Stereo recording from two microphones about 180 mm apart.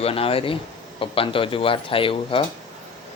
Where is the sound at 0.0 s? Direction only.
30° left (ahead or behind).